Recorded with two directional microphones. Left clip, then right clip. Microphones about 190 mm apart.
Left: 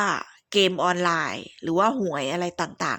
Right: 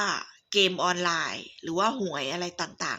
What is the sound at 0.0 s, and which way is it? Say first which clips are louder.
Speech: left 4 dB; 55° left (ahead or behind).